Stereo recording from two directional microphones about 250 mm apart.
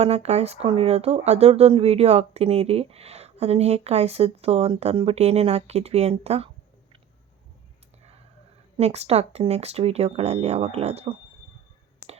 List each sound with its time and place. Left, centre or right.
0.0 s speech: right
8.8 s speech: right